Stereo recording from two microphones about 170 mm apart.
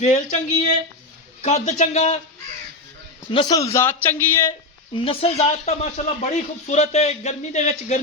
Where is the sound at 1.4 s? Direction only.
40° left (ahead or behind).